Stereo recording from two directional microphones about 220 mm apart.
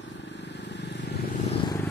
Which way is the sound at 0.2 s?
50° left (ahead or behind).